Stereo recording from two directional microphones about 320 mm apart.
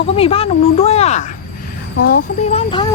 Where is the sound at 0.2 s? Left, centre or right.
Centre.